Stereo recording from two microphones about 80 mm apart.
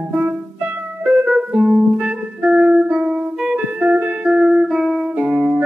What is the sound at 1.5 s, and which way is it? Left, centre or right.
Music, centre.